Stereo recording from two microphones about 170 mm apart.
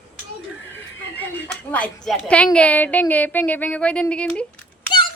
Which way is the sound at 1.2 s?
10° left (ahead or behind).